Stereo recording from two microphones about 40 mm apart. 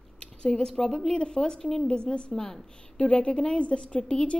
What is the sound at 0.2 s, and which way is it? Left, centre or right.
A woman's voice, centre.